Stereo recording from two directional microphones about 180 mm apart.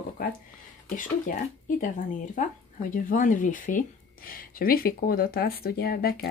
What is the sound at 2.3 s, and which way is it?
Speech, 50° left (ahead or behind).